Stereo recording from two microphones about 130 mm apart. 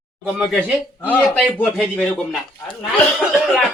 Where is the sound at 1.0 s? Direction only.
10° left (ahead or behind).